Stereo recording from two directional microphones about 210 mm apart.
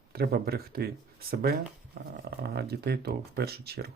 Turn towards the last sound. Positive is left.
turn(degrees=-50)  # may be behind; listen again after turning